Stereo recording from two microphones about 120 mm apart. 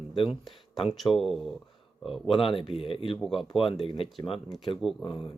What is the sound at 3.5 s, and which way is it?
Speech, 45° left (ahead or behind).